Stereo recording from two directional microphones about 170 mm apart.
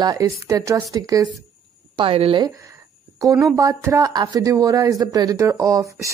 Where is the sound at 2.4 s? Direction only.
20° right (ahead or behind).